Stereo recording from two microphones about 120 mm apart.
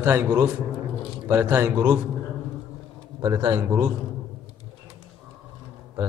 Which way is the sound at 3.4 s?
25° right (ahead or behind).